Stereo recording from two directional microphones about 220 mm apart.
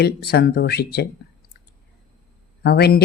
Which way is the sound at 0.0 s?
45° left (ahead or behind).